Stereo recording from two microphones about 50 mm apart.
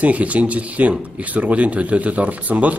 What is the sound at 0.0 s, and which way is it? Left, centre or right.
Speech, right.